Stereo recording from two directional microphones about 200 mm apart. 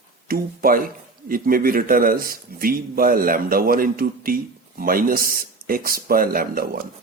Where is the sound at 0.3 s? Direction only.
45° right (ahead or behind).